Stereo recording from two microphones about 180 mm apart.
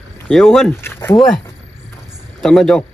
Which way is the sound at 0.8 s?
15° left (ahead or behind).